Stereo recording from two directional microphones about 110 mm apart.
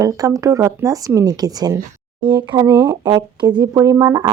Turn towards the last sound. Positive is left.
turn(degrees=-35)  # may be behind; listen again after turning